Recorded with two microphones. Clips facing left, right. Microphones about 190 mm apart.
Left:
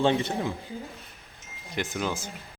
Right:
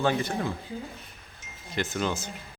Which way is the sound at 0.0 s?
25° left (ahead or behind).